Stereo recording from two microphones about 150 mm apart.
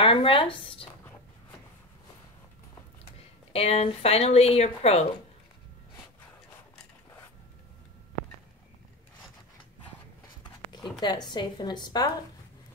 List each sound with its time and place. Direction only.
0.0 s speech: 40° left (ahead or behind)
3.5 s a woman's voice: 40° left (ahead or behind)
10.4 s speech: 30° left (ahead or behind)